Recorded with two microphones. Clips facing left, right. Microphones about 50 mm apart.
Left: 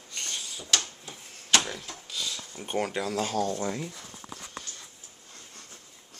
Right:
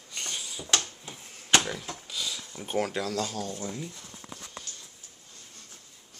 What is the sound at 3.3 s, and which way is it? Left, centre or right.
Speech, left.